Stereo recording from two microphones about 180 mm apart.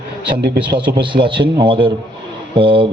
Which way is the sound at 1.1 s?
25° right (ahead or behind).